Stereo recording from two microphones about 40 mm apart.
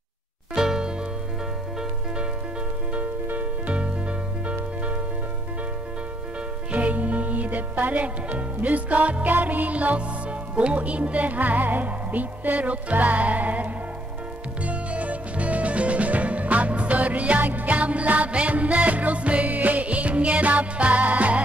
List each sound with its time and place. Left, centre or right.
0.6 s music: centre
3.3 s music: right
6.7 s speech: right
14.6 s music: right